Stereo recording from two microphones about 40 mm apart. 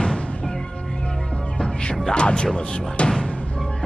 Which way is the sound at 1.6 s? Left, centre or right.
Centre.